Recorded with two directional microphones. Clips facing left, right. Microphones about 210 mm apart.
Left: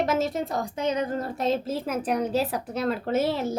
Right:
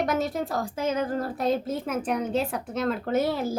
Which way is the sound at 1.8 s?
35° left (ahead or behind).